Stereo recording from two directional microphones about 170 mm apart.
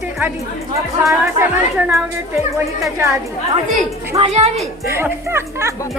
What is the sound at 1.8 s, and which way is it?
Speech, 10° right (ahead or behind).